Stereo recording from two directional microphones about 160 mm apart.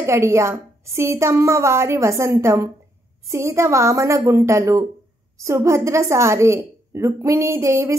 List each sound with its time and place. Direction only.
0.0 s a woman's voice: 15° right (ahead or behind)